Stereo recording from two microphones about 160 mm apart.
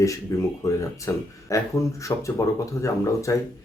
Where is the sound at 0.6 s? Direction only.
20° left (ahead or behind).